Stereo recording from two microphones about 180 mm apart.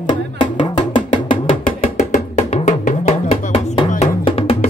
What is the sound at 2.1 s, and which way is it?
Music, 40° left (ahead or behind).